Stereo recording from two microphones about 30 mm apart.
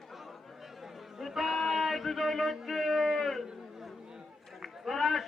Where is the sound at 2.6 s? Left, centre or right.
Centre.